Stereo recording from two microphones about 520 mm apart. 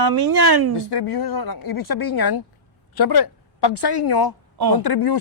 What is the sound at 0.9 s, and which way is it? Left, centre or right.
A woman's voice, left.